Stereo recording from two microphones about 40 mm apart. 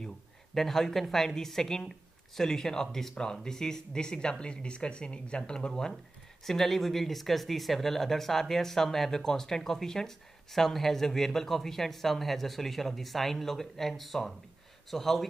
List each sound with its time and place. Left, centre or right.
0.6 s speech: centre